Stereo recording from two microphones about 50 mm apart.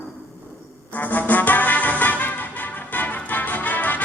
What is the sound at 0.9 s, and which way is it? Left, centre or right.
Music, left.